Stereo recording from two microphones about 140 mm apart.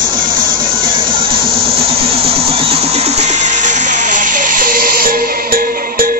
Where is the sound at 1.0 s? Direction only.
40° right (ahead or behind).